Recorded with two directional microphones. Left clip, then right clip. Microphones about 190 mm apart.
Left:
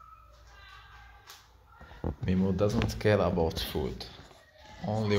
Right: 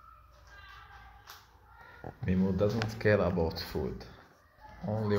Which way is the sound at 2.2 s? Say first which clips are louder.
Left 1 dB; 15° left (ahead or behind).